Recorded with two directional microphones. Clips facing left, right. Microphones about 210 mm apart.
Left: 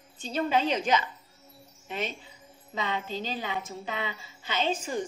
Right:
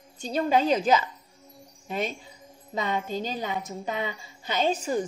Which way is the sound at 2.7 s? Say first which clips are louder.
Right 4 dB; 45° right (ahead or behind).